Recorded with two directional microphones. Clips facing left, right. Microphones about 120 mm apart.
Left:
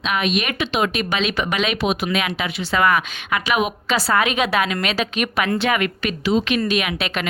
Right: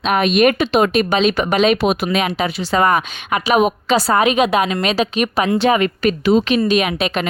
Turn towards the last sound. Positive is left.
turn(degrees=-30)  # may be behind; listen again after turning